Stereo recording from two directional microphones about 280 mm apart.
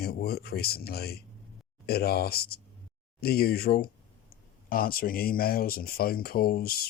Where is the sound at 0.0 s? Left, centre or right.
Left.